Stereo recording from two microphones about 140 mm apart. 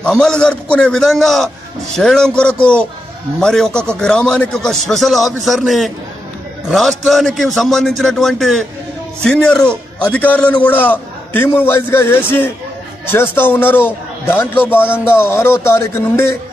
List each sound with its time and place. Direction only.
0.0 s a man's voice: 5° left (ahead or behind)